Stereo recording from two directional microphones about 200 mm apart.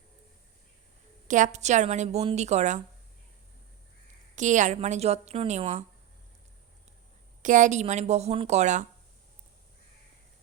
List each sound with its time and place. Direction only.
1.3 s a woman's voice: 35° right (ahead or behind)
4.4 s a woman's voice: 40° right (ahead or behind)
7.4 s a woman's voice: 40° right (ahead or behind)